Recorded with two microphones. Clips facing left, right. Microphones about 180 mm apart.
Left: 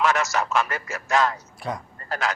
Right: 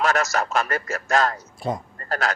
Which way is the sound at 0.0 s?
45° right (ahead or behind).